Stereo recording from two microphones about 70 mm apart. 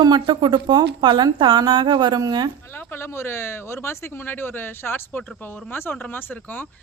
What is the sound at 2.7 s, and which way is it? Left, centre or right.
A woman's voice, left.